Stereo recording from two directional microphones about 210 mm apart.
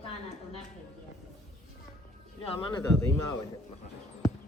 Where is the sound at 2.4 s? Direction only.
25° left (ahead or behind).